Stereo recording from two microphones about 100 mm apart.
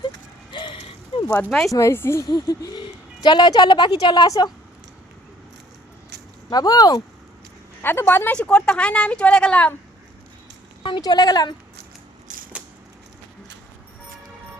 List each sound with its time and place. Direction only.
0.5 s a sound: 55° left (ahead or behind)
1.5 s speech: 5° left (ahead or behind)
1.7 s a woman's voice: 25° left (ahead or behind)
2.2 s a woman's voice: 40° left (ahead or behind)
6.5 s speech: 40° left (ahead or behind)
7.8 s a woman's voice: 20° left (ahead or behind)
8.4 s a woman's voice: 10° left (ahead or behind)
10.8 s speech: 45° left (ahead or behind)